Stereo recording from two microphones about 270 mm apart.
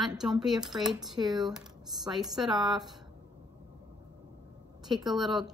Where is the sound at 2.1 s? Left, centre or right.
Centre.